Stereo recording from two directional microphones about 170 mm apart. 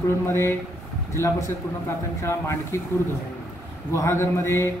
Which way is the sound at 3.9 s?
15° left (ahead or behind).